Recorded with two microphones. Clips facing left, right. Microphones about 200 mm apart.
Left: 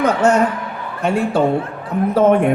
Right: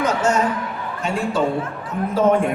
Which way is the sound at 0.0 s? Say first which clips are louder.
Left 5 dB; 60° left (ahead or behind).